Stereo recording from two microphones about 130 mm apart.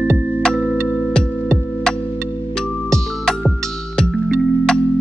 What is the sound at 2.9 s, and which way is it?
Music, 5° left (ahead or behind).